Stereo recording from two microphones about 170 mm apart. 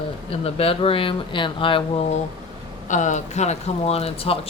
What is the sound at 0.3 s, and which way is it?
Speech, 35° left (ahead or behind).